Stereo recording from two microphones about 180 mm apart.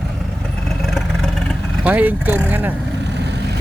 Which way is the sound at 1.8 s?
10° right (ahead or behind).